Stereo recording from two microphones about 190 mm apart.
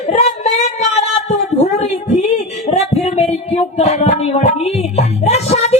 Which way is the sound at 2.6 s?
35° left (ahead or behind).